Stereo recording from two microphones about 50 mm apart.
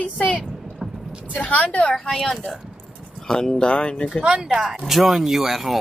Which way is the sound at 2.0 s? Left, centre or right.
Centre.